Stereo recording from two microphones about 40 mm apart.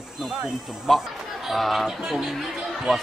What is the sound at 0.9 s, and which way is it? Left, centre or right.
Speech, centre.